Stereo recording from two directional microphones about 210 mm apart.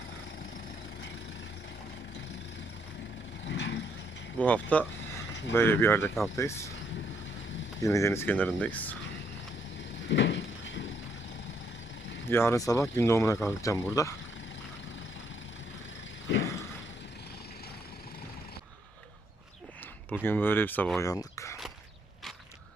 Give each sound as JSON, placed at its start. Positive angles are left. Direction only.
{"t": 3.4, "sound": "vehicle", "side_deg": 55}
{"t": 4.4, "sound": "speech", "side_deg": 5}
{"t": 7.8, "sound": "speech", "side_deg": 15}
{"t": 10.1, "sound": "a sound", "side_deg": 60}
{"t": 12.3, "sound": "speech", "side_deg": 10}
{"t": 16.3, "sound": "vehicle", "side_deg": 60}
{"t": 20.2, "sound": "speech", "side_deg": 10}
{"t": 21.1, "sound": "a sound", "side_deg": 15}